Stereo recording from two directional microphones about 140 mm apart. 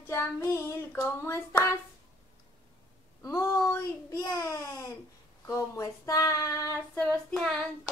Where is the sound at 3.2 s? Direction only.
20° left (ahead or behind).